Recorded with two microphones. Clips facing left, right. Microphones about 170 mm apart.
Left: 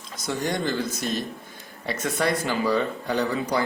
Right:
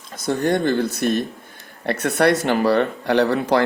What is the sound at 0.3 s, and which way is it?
Speech, 55° right (ahead or behind).